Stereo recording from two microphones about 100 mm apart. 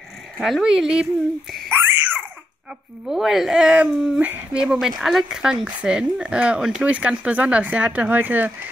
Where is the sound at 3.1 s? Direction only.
5° right (ahead or behind).